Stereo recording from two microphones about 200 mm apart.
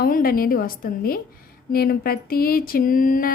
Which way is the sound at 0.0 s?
45° left (ahead or behind).